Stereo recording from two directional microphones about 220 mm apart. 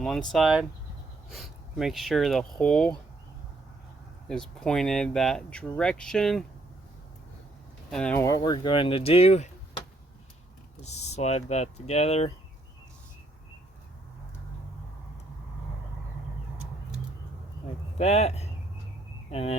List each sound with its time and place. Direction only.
0.0 s speech: centre (ahead or behind)
4.3 s speech: 5° left (ahead or behind)
7.9 s speech: 5° left (ahead or behind); by 9.5 s 30° left (ahead or behind)
10.8 s speech: 30° left (ahead or behind)
17.9 s speech: 30° left (ahead or behind)